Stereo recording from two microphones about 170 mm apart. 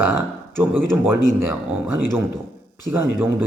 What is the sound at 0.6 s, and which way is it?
Speech, 10° right (ahead or behind).